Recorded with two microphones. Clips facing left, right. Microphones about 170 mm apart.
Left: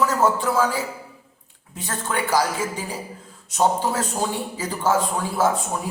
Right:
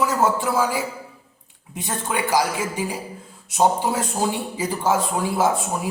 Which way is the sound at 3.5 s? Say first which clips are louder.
Right 1 dB; 10° right (ahead or behind).